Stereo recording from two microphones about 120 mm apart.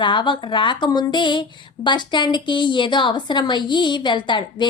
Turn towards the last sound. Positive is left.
turn(degrees=40)  # may be behind; listen again after turning